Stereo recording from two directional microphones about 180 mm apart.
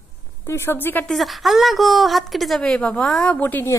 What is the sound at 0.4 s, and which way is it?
A woman's voice, 15° left (ahead or behind).